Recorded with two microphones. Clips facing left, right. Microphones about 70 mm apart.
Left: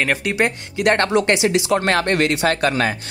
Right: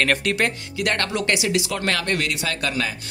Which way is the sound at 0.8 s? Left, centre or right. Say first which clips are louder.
Left 7 dB; left.